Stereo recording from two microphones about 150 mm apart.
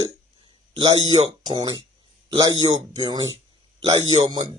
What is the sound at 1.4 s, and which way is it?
Speech, 30° right (ahead or behind).